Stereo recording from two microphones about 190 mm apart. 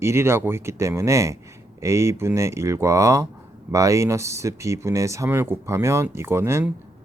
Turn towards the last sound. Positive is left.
turn(degrees=-15)  # may be behind; listen again after turning